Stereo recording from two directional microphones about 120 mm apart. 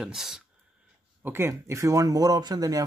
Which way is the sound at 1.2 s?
20° right (ahead or behind).